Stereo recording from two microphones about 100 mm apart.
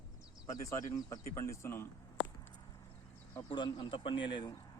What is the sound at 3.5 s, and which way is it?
Speech, 50° left (ahead or behind).